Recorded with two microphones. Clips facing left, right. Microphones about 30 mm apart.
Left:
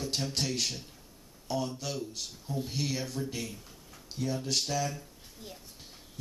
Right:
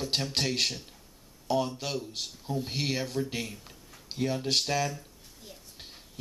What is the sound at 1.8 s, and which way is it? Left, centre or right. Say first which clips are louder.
Speech: right 3 dB; right.